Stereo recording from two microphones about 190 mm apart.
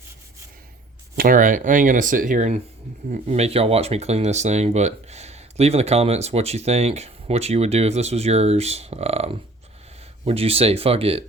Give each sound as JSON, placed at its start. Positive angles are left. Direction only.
{"t": 1.1, "sound": "speech", "side_deg": -50}